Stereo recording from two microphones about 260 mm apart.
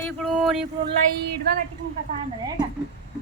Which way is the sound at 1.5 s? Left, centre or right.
Right.